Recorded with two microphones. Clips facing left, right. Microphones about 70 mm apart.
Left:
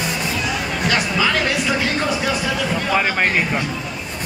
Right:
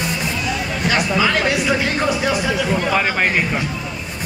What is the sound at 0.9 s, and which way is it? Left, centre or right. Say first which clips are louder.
Speech: right 2 dB; centre.